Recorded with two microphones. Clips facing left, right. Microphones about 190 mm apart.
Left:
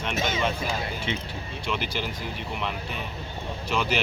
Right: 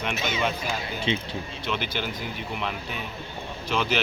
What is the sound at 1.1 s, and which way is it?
Speech, 25° right (ahead or behind).